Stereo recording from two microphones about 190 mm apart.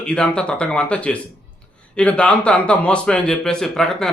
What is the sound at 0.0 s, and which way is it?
Speech, 5° left (ahead or behind).